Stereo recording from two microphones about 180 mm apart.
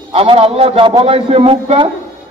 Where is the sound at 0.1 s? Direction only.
30° right (ahead or behind).